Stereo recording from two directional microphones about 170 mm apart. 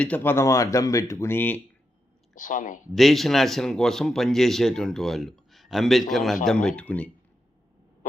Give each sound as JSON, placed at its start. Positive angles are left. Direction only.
{"t": 0.0, "sound": "speech", "side_deg": 10}
{"t": 2.3, "sound": "speech", "side_deg": 50}
{"t": 2.9, "sound": "a man's voice", "side_deg": 0}